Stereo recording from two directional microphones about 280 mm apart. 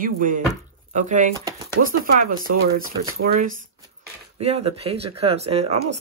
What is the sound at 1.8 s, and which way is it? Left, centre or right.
Speech, right.